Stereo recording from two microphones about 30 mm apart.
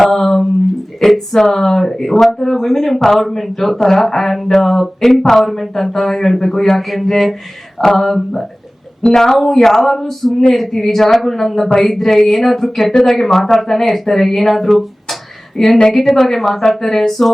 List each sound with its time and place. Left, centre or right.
0.0 s a sound: centre
1.0 s speech: centre
9.0 s speech: centre